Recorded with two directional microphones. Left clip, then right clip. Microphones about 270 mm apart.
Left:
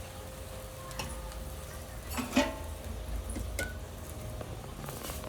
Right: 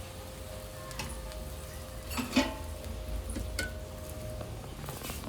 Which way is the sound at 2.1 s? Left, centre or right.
Centre.